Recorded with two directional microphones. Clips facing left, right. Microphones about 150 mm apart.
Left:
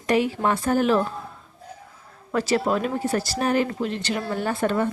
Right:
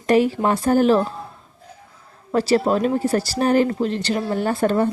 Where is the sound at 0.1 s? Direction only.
35° right (ahead or behind).